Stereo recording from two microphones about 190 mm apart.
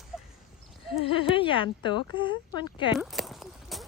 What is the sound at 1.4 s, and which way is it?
Speech, 25° left (ahead or behind).